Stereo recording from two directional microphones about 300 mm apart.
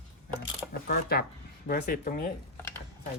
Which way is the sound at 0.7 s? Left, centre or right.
Left.